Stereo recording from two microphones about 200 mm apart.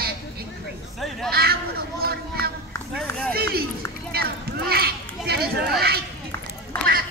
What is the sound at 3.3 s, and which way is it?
Run, 50° right (ahead or behind).